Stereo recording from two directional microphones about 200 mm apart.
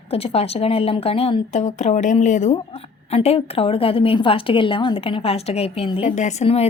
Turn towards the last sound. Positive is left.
turn(degrees=35)  # may be behind; listen again after turning